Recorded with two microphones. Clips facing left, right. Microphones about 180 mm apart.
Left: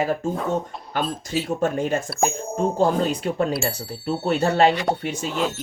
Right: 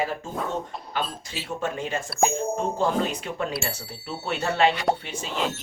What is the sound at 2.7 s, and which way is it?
Speech, 40° left (ahead or behind).